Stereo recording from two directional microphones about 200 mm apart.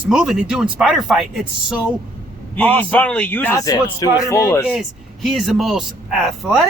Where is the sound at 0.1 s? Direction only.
5° right (ahead or behind).